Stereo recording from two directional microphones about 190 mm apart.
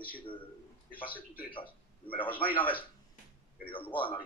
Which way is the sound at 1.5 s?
25° left (ahead or behind).